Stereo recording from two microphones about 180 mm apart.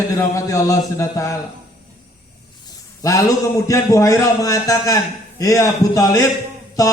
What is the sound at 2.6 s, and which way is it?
A man's voice, 20° left (ahead or behind).